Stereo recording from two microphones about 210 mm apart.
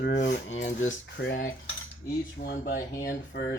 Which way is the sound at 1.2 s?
50° left (ahead or behind).